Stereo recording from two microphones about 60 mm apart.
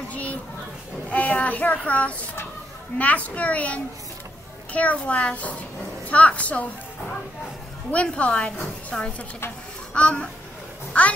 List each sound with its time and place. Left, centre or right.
0.1 s children playing: left
1.1 s a child's voice: left
7.9 s a child's voice: left